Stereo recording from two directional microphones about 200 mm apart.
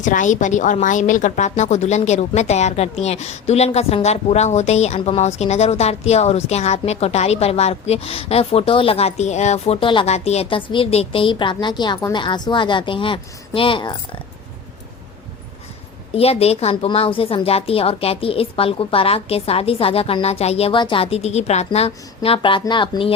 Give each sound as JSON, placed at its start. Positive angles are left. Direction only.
{"t": 0.0, "sound": "a woman's voice", "side_deg": 40}
{"t": 16.1, "sound": "a woman's voice", "side_deg": 30}